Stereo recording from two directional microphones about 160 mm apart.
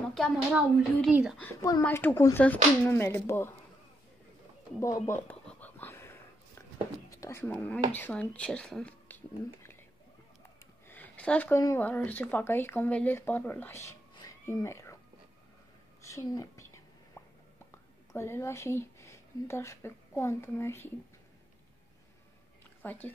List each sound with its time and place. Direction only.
0.1 s speech: 5° left (ahead or behind)
1.4 s speech: 20° left (ahead or behind)
4.7 s a sound: 20° left (ahead or behind)
7.1 s whispering: 15° left (ahead or behind)
7.5 s speech: 5° left (ahead or behind)
10.9 s speech: 10° left (ahead or behind)
16.0 s whispering: 20° left (ahead or behind)
17.6 s speech: 15° left (ahead or behind)
22.8 s speech: 10° left (ahead or behind)